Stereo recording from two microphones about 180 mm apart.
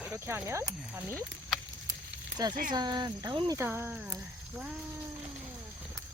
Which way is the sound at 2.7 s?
25° right (ahead or behind).